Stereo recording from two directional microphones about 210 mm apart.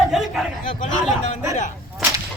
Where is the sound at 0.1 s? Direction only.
Centre (ahead or behind).